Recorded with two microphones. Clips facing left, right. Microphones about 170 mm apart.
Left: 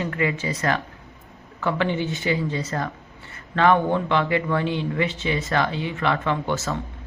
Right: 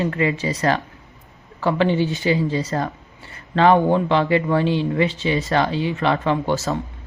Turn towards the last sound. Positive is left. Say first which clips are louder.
# right 4 dB
turn(degrees=-20)  # may be behind; listen again after turning